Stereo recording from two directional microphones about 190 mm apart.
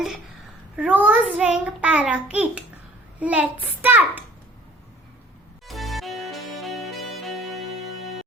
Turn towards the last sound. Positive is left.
turn(degrees=0)  # may be behind; listen again after turning